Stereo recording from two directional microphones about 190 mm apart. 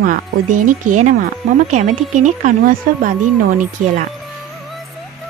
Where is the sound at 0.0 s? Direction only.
45° right (ahead or behind).